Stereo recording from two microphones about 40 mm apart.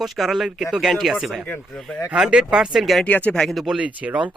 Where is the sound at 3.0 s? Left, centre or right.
Left.